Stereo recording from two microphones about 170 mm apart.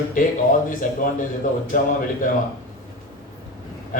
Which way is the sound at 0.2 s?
55° left (ahead or behind).